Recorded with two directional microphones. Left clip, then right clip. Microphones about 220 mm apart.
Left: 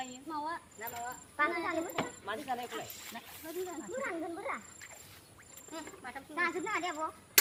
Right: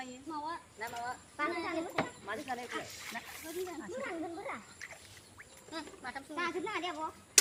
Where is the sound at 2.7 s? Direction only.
20° right (ahead or behind).